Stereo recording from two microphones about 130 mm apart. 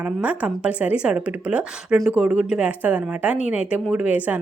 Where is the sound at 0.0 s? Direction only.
10° right (ahead or behind).